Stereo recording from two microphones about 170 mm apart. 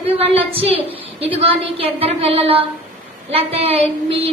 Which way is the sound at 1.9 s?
35° right (ahead or behind).